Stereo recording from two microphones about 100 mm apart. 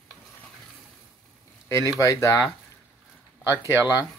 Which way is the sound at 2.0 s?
30° left (ahead or behind).